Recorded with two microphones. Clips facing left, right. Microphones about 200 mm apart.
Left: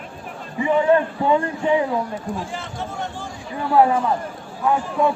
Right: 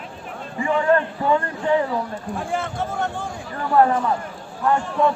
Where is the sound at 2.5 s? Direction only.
55° right (ahead or behind).